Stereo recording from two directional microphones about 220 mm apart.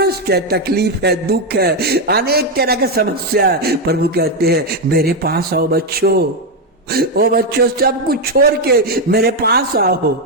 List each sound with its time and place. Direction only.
0.0 s music: 45° right (ahead or behind)